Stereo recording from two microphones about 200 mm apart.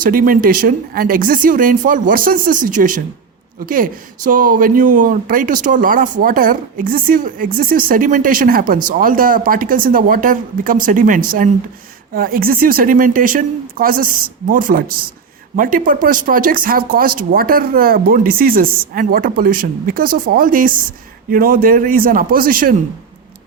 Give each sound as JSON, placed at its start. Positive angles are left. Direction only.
{"t": 0.0, "sound": "speech", "side_deg": -45}